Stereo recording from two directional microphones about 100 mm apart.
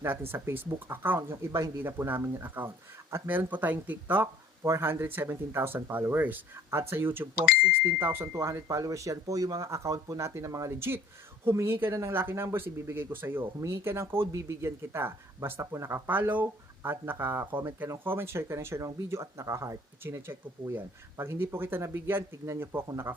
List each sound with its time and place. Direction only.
0.3 s speech: 20° right (ahead or behind)